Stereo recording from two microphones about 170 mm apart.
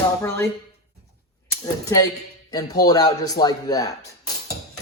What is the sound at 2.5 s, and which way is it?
A man's voice, 20° left (ahead or behind).